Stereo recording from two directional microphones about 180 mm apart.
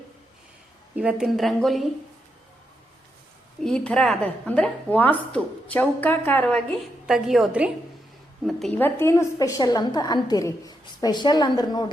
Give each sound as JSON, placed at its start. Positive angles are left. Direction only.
{"t": 0.9, "sound": "a woman's voice", "side_deg": -5}
{"t": 3.6, "sound": "a woman's voice", "side_deg": 5}
{"t": 7.1, "sound": "a woman's voice", "side_deg": 0}